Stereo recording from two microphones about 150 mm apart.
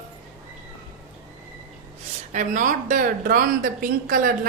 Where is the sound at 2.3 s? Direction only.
60° right (ahead or behind).